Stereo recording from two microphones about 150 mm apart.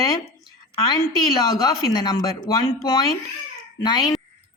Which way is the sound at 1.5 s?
25° left (ahead or behind).